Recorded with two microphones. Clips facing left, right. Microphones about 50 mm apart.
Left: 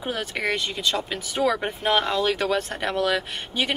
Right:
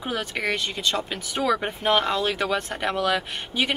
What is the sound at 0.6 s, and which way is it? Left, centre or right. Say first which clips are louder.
A woman's voice: even; centre.